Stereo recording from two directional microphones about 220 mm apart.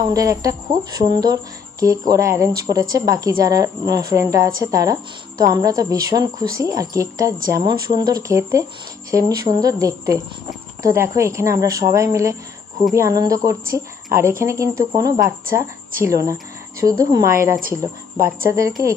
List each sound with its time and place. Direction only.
0.1 s speech: 15° right (ahead or behind)